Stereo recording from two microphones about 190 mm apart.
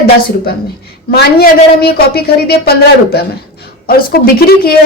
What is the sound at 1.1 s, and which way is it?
Speech, 55° left (ahead or behind).